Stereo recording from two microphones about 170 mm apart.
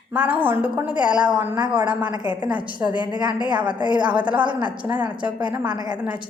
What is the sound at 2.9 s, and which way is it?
Speech, 25° left (ahead or behind).